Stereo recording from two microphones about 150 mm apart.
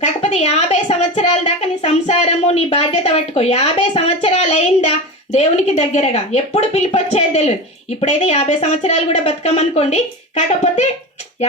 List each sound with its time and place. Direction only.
0.0 s a woman's voice: 45° left (ahead or behind)